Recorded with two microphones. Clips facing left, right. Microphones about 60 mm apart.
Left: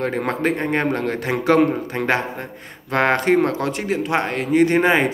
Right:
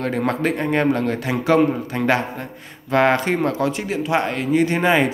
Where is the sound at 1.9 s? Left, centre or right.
Left.